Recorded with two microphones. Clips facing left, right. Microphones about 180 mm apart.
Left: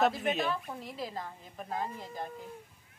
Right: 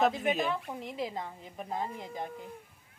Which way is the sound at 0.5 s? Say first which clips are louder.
Right 1 dB; 20° right (ahead or behind).